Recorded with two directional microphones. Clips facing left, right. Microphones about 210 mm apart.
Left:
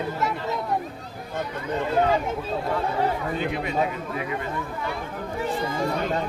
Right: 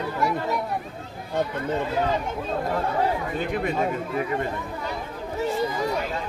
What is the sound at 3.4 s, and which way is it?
Speech, 50° right (ahead or behind).